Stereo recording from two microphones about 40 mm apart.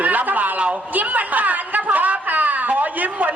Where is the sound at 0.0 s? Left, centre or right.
Right.